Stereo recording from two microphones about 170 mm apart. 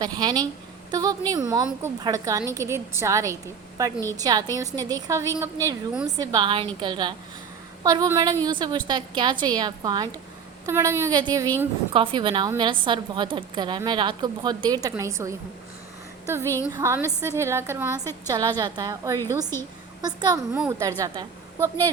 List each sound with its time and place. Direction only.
0.0 s a woman's voice: 25° right (ahead or behind)
17.9 s a woman's voice: 15° left (ahead or behind)
18.3 s a woman's voice: 25° right (ahead or behind)